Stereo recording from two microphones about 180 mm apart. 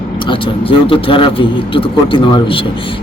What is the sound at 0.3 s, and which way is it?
A man's voice, 30° left (ahead or behind).